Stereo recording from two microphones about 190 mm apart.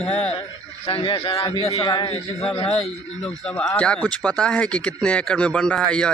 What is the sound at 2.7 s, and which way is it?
Speech, 5° left (ahead or behind).